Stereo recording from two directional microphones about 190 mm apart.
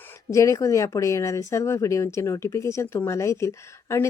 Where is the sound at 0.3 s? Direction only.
15° left (ahead or behind).